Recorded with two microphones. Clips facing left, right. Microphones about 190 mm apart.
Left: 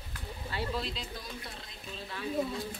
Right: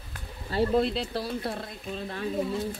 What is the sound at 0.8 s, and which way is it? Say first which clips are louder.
Speech: right 11 dB; 65° right (ahead or behind).